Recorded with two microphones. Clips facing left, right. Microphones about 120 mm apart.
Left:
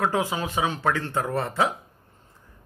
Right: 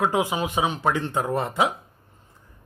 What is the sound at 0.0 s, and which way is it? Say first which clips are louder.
Speech: right 2 dB; 15° right (ahead or behind).